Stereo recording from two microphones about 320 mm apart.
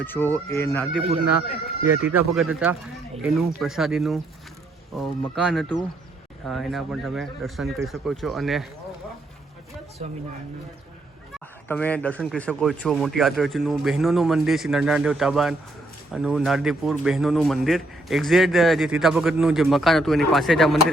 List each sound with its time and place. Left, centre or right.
0.0 s speech: centre
2.0 s a man's voice: centre
11.7 s a man's voice: centre